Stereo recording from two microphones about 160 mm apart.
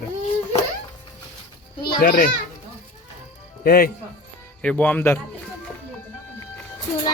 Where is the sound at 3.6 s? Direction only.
70° left (ahead or behind).